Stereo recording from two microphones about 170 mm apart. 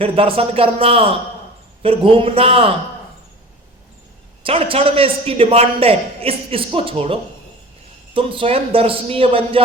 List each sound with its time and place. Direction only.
0.0 s a man's voice: 35° right (ahead or behind)
4.4 s a man's voice: 35° right (ahead or behind)